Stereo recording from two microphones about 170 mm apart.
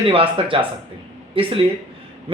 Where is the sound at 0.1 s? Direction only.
30° right (ahead or behind).